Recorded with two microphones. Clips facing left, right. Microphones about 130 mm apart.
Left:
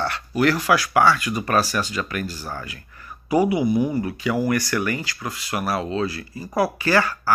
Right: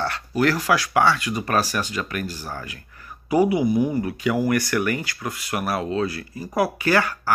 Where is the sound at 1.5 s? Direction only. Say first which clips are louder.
Left 2 dB; 45° right (ahead or behind).